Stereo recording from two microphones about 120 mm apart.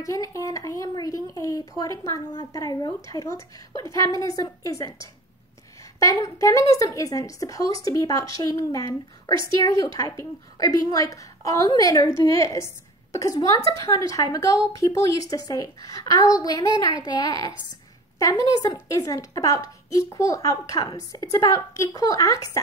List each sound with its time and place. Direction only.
0.0 s a woman's voice: 30° left (ahead or behind)